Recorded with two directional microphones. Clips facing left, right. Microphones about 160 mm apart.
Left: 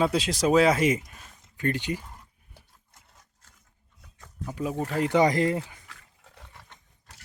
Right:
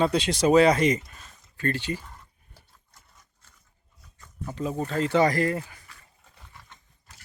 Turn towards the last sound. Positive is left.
turn(degrees=70)  # may be behind; listen again after turning